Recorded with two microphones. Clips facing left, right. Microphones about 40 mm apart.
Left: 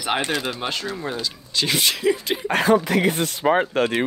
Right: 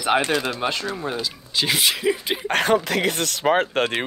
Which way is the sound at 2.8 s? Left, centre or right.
Right.